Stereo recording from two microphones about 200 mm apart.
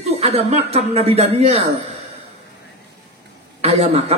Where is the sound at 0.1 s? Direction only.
30° right (ahead or behind).